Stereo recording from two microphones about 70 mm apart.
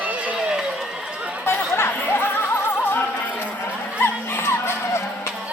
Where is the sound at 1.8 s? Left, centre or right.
Left.